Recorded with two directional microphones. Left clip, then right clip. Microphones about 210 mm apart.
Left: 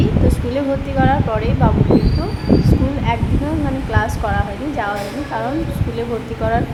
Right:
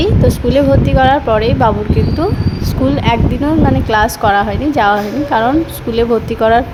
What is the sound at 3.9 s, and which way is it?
Speech, 35° right (ahead or behind).